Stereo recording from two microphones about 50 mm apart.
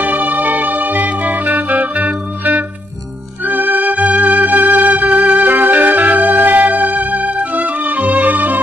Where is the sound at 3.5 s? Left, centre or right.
Right.